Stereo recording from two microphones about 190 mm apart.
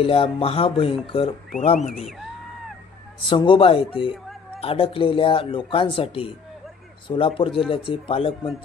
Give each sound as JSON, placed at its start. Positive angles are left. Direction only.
{"t": 0.0, "sound": "speech", "side_deg": 30}
{"t": 1.9, "sound": "speech", "side_deg": 0}
{"t": 3.3, "sound": "speech", "side_deg": 25}